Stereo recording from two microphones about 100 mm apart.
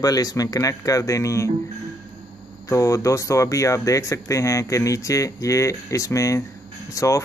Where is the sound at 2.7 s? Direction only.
35° left (ahead or behind).